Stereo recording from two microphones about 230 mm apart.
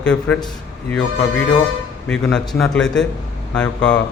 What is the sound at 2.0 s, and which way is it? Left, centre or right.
A man's voice, centre.